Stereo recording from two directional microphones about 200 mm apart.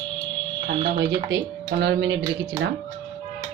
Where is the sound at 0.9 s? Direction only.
60° right (ahead or behind).